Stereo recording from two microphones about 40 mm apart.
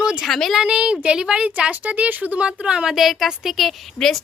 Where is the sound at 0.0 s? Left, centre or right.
Centre.